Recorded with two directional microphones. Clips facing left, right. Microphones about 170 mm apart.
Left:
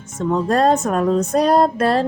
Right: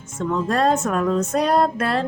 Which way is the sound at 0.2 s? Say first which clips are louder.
Left 4 dB; 35° left (ahead or behind).